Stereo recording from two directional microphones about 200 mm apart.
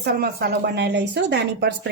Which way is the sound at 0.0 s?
50° right (ahead or behind).